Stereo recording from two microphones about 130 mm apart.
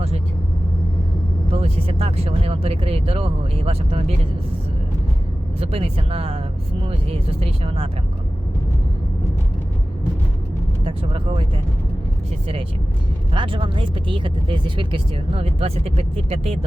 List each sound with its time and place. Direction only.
1.5 s speech: 50° right (ahead or behind)
5.5 s speech: 50° right (ahead or behind)
10.8 s speech: 45° right (ahead or behind)
13.3 s speech: 40° right (ahead or behind)